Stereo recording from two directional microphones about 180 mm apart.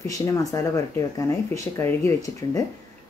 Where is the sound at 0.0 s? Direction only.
20° left (ahead or behind).